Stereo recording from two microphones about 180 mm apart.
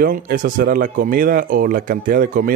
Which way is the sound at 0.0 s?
50° right (ahead or behind).